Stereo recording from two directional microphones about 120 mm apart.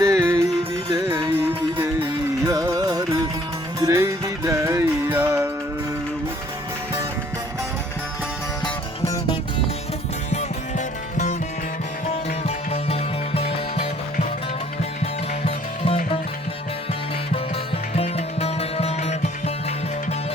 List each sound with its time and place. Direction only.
0.0 s music: 25° right (ahead or behind)
2.5 s music: 30° right (ahead or behind)
10.3 s music: 75° left (ahead or behind)
12.0 s music: 60° left (ahead or behind)
15.0 s music: 55° left (ahead or behind)
17.9 s music: 60° left (ahead or behind)